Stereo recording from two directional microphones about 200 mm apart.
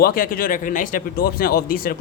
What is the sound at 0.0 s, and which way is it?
Speech, 45° left (ahead or behind).